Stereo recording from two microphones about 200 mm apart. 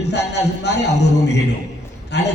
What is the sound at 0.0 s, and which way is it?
A man's voice, 60° left (ahead or behind).